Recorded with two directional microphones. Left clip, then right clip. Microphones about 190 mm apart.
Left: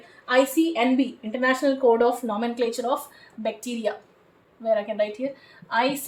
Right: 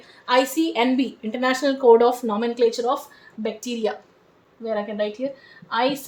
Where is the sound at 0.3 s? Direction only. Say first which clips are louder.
Right 1 dB; 40° right (ahead or behind).